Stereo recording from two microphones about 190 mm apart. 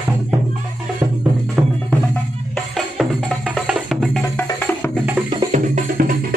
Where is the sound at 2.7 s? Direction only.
Centre (ahead or behind).